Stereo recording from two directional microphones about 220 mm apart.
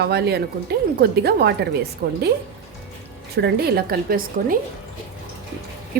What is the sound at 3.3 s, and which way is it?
A woman's voice, 45° right (ahead or behind).